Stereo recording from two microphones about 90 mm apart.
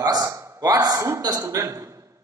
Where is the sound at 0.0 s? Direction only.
40° right (ahead or behind).